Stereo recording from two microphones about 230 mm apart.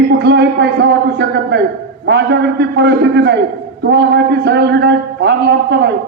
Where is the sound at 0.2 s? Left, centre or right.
Right.